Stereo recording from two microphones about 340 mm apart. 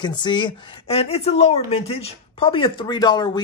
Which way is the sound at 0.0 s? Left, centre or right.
Centre.